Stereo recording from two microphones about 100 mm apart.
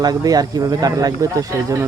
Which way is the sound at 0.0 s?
40° right (ahead or behind).